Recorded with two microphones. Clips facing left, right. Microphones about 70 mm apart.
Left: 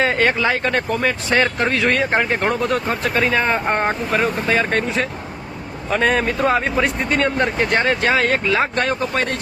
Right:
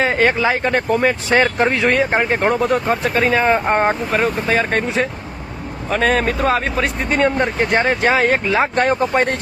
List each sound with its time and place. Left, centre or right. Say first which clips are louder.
0.0 s speech: right 2 dB; centre
5.9 s speech: right 1 dB; centre
8.7 s speech: right 4 dB; right